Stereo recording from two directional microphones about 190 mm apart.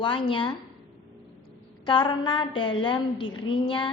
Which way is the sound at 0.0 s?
25° left (ahead or behind).